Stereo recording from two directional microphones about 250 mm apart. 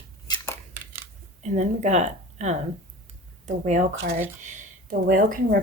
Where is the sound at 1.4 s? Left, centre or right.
Right.